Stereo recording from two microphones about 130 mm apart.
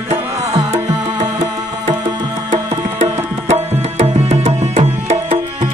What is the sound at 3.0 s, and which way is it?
Tabla, 55° right (ahead or behind).